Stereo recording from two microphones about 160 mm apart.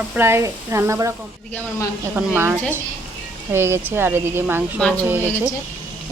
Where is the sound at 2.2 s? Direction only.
15° right (ahead or behind).